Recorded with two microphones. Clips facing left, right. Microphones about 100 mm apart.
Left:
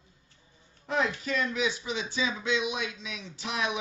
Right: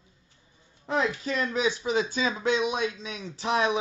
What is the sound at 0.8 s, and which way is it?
Speech, 30° right (ahead or behind).